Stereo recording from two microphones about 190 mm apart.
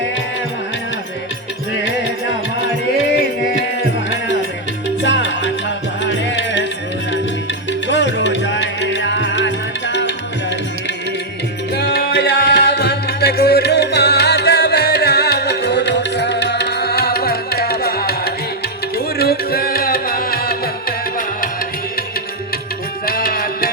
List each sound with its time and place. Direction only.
5.0 s music: 70° left (ahead or behind)
7.7 s music: 70° left (ahead or behind)
11.7 s tabla: 60° left (ahead or behind)
18.9 s music: 55° left (ahead or behind)
23.0 s music: 50° left (ahead or behind)